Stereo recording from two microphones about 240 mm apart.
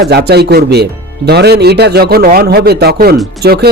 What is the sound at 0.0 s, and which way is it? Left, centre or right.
A man's voice, right.